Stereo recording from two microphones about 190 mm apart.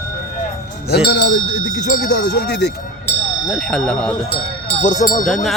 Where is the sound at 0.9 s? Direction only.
65° left (ahead or behind).